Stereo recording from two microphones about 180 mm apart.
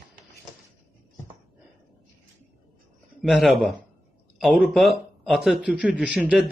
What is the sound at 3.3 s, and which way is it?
A man's voice, centre (ahead or behind).